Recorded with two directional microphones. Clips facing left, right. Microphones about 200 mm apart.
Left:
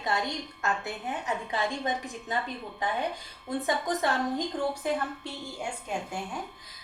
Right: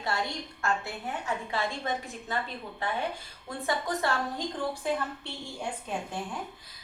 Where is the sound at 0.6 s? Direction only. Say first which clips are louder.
Right 1 dB; 20° left (ahead or behind).